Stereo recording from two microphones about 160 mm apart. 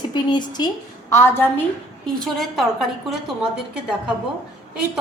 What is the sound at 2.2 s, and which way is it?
A woman's voice, centre (ahead or behind).